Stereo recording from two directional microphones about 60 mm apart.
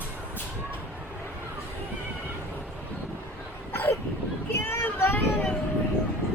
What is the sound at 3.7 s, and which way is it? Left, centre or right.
Cough, left.